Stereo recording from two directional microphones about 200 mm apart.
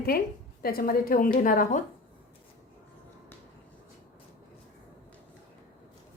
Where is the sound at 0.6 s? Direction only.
45° left (ahead or behind).